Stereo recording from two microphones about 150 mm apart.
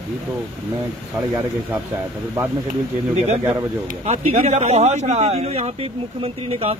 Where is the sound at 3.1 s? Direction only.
45° right (ahead or behind).